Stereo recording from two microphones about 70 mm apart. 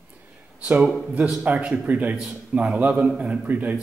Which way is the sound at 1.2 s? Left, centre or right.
Centre.